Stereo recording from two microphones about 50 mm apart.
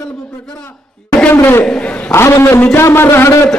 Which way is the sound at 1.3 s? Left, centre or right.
Left.